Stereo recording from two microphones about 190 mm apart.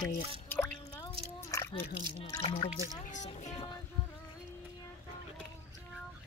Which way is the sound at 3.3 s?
30° left (ahead or behind).